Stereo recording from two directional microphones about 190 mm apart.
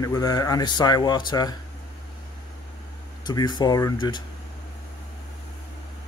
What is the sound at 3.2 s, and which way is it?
Speech, 20° left (ahead or behind).